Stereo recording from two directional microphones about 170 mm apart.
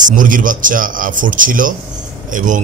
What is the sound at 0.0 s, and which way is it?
Speech, 50° right (ahead or behind).